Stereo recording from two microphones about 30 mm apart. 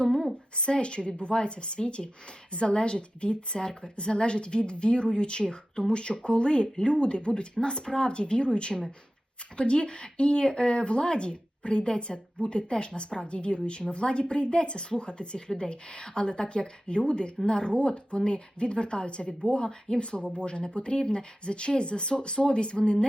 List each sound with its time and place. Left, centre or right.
0.5 s a woman's voice: left
9.7 s a woman's voice: left